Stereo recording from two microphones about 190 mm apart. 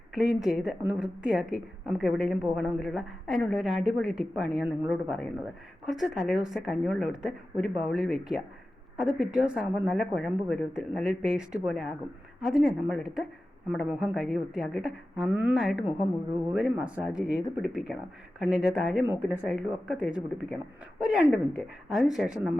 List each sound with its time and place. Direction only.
0.1 s a woman's voice: 5° right (ahead or behind)